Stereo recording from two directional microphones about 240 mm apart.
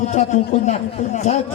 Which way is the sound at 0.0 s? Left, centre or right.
Left.